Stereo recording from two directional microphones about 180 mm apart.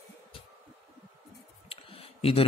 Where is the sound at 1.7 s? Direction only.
30° left (ahead or behind).